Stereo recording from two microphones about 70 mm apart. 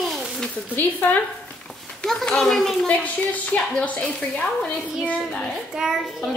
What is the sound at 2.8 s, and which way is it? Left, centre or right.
Speech, centre.